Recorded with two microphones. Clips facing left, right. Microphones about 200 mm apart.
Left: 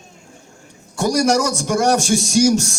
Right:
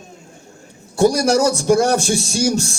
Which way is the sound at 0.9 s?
35° right (ahead or behind).